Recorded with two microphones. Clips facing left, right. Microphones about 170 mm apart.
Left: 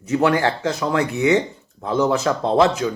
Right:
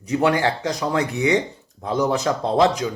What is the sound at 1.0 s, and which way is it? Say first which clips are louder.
A man's voice: left 2 dB; 15° right (ahead or behind).